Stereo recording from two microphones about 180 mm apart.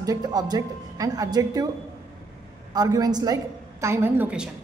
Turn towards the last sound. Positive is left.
turn(degrees=-10)  # may be behind; listen again after turning